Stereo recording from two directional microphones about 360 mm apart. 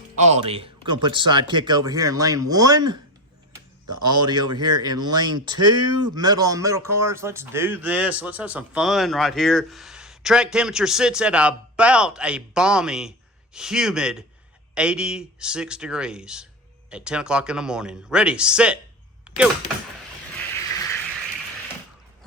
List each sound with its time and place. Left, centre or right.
0.2 s a man's voice: centre
4.0 s speech: centre
19.3 s a sound: centre